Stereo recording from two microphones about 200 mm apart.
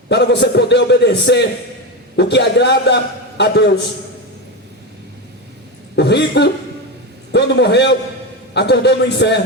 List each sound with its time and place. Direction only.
0.1 s a man's voice: 60° left (ahead or behind)
6.0 s a man's voice: 60° left (ahead or behind)